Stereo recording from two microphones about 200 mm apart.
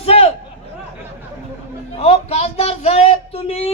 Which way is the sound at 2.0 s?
30° left (ahead or behind).